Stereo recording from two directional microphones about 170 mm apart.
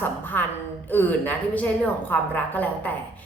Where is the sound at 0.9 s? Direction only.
10° left (ahead or behind).